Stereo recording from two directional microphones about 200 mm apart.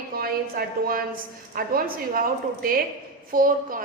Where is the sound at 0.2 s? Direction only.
45° right (ahead or behind).